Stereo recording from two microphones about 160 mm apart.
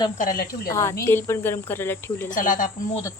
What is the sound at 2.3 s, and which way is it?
Speech, 55° left (ahead or behind).